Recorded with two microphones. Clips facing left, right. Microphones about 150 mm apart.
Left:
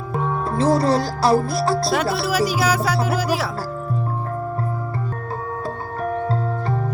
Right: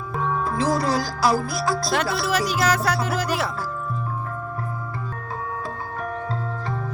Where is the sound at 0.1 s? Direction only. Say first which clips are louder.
Left 2 dB; 35° left (ahead or behind).